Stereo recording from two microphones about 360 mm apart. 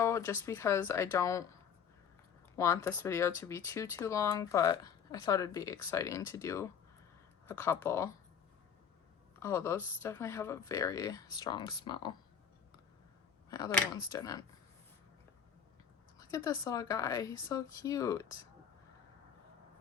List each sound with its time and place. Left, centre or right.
0.0 s speech: centre
2.6 s speech: centre
9.4 s speech: centre
13.5 s speech: centre
16.1 s speech: centre